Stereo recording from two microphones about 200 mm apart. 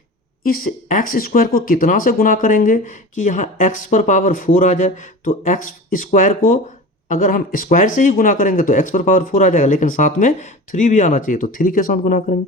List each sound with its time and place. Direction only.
0.4 s speech: 45° left (ahead or behind)